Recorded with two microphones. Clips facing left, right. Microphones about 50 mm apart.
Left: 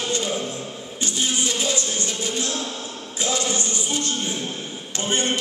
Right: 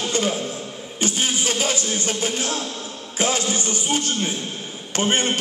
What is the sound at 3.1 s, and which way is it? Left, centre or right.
Music, right.